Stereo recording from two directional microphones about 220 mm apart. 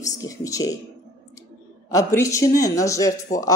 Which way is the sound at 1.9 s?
15° left (ahead or behind).